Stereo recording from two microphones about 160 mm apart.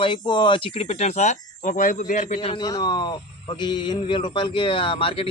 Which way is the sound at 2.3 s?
30° left (ahead or behind).